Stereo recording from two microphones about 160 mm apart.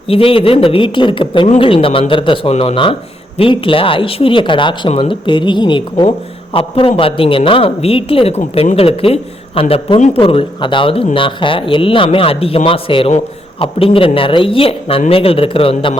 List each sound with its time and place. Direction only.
0.1 s a man's voice: 35° left (ahead or behind)